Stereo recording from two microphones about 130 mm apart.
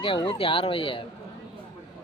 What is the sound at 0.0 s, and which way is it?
Speech, 40° left (ahead or behind).